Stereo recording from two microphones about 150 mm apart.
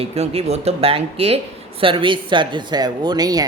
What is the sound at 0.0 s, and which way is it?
Speech, 45° right (ahead or behind).